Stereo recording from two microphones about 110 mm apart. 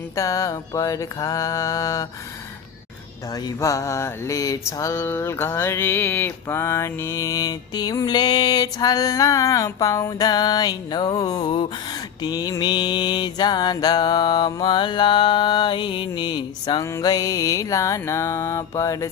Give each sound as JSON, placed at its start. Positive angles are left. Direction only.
{"t": 0.2, "sound": "mantra", "side_deg": 30}
{"t": 3.4, "sound": "mantra", "side_deg": 30}